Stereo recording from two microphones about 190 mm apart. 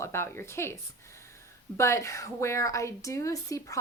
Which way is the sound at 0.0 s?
15° left (ahead or behind).